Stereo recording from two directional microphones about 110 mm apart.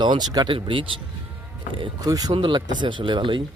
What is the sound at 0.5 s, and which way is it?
Speech, 50° right (ahead or behind).